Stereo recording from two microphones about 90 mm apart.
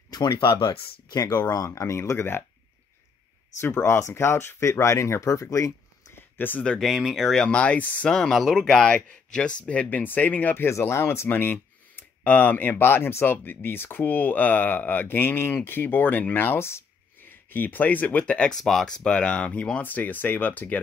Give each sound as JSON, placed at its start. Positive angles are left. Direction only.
{"t": 0.1, "sound": "speech", "side_deg": 60}
{"t": 1.5, "sound": "speech", "side_deg": 40}
{"t": 3.6, "sound": "speech", "side_deg": 30}
{"t": 6.1, "sound": "a sound", "side_deg": 20}
{"t": 6.6, "sound": "speech", "side_deg": 5}
{"t": 7.4, "sound": "speech", "side_deg": 15}
{"t": 8.1, "sound": "speech", "side_deg": 5}